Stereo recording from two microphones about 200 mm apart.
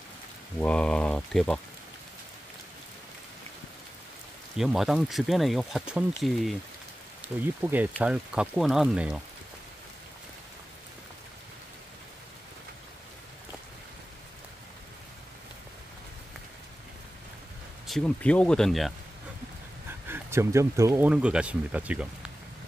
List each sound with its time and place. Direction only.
0.6 s speech: 5° left (ahead or behind)
4.6 s speech: centre (ahead or behind)
17.8 s speech: 5° left (ahead or behind)
19.9 s speech: 10° right (ahead or behind)